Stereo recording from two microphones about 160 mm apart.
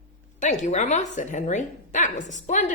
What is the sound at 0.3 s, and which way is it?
Speech, 50° left (ahead or behind).